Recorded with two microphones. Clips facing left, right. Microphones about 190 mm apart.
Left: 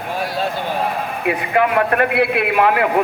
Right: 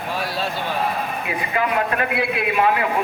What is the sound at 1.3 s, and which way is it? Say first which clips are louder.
A woman's voice: left 8 dB; 60° left (ahead or behind).